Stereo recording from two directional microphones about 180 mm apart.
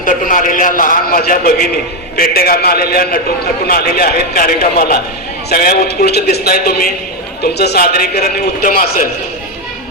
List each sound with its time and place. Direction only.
0.0 s a man's voice: 45° left (ahead or behind)